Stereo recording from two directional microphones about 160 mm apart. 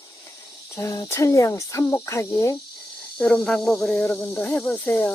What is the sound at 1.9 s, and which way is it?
Speech, 15° left (ahead or behind).